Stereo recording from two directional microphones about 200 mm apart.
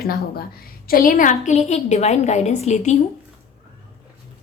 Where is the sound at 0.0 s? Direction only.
50° left (ahead or behind); by 3.0 s 35° left (ahead or behind).